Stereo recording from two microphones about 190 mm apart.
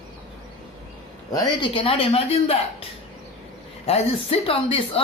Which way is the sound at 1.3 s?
25° left (ahead or behind).